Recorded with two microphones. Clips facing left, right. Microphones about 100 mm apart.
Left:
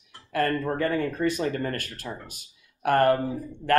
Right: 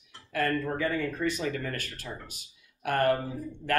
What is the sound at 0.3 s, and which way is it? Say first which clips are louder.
A man's voice: left 3 dB; 45° left (ahead or behind).